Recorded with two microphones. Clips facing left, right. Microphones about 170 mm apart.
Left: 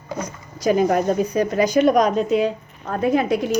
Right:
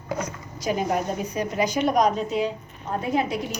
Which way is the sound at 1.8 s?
90° left.